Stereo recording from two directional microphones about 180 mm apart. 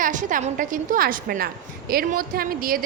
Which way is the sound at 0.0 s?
45° right (ahead or behind).